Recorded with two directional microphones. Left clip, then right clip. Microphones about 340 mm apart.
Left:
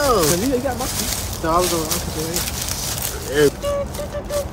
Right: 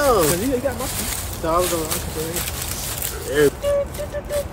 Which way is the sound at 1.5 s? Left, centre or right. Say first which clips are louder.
Left 1 dB; centre.